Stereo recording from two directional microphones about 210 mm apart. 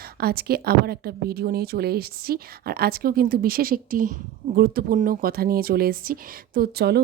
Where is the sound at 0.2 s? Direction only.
45° right (ahead or behind).